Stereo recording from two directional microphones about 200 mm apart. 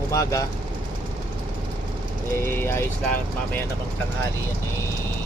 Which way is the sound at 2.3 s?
10° left (ahead or behind).